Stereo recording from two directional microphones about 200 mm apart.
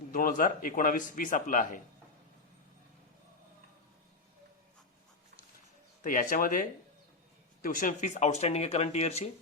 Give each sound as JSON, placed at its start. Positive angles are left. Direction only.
{"t": 0.1, "sound": "a man's voice", "side_deg": 45}
{"t": 6.0, "sound": "speech", "side_deg": 40}